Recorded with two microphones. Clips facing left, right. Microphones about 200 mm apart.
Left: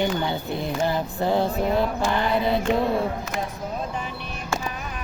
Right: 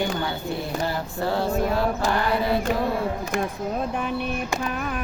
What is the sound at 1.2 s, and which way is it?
Mantra, 20° left (ahead or behind).